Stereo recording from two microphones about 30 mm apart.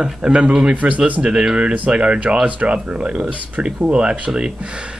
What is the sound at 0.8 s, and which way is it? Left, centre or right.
Speech, right.